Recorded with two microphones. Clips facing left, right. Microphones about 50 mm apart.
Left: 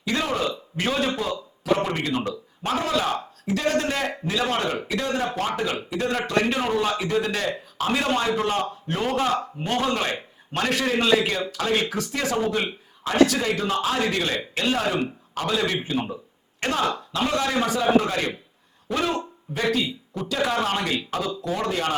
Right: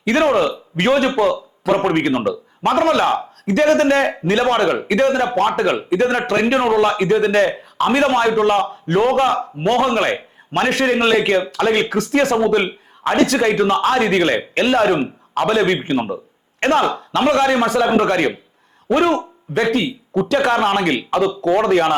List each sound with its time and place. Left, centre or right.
0.0 s a man's voice: right
20.2 s a man's voice: right